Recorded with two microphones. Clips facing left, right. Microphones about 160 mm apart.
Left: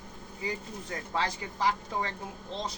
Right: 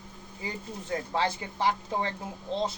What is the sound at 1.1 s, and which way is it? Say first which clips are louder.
Speech: right 1 dB; 30° right (ahead or behind).